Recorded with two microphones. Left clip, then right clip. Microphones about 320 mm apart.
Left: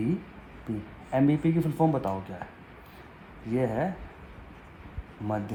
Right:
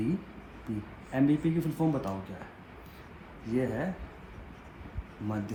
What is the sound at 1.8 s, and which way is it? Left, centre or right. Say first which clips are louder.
Speech: left 6 dB; left.